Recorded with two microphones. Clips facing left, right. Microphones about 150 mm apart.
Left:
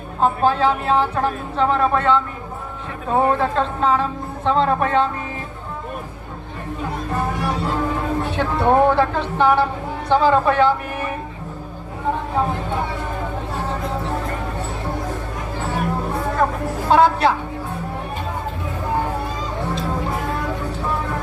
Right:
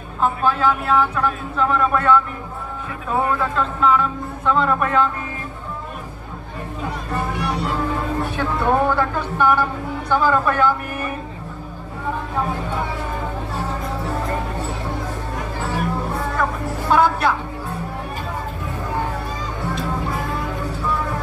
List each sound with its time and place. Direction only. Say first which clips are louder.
0.2 s speech: left 2 dB; 35° left (ahead or behind)
8.4 s a woman's voice: left 4 dB; 25° left (ahead or behind)
16.9 s a woman's voice: left 2 dB; 30° left (ahead or behind)